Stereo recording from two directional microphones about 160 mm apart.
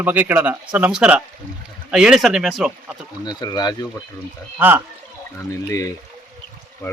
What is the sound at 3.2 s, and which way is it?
Speech, 25° left (ahead or behind).